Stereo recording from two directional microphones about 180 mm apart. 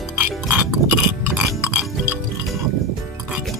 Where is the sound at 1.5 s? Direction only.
15° right (ahead or behind).